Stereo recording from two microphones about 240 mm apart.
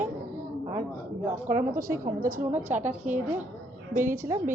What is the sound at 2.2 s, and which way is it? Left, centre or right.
Speech, right.